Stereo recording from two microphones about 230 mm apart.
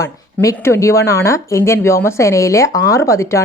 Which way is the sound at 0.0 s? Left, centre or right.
Centre.